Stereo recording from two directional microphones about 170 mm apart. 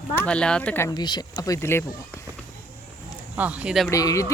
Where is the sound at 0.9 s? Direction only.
25° left (ahead or behind).